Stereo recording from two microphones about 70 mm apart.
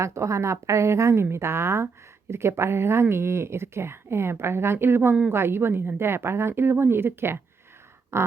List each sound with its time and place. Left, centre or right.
0.0 s a woman's voice: right